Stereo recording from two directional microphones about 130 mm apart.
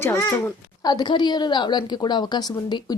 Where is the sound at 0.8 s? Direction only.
35° left (ahead or behind).